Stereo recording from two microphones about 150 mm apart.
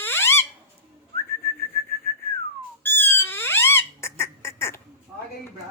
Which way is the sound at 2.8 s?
15° left (ahead or behind).